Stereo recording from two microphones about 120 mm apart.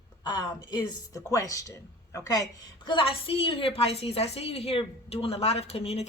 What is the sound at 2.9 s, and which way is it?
A woman's voice, 45° left (ahead or behind).